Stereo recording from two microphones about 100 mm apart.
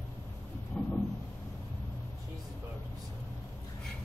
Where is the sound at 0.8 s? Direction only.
15° left (ahead or behind).